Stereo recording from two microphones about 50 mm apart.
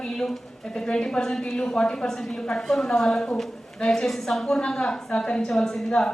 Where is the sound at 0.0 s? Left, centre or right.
Centre.